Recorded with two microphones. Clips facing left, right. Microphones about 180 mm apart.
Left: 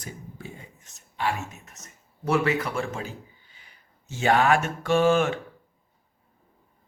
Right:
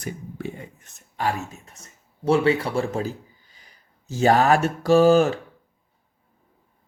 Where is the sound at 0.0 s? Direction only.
65° right (ahead or behind).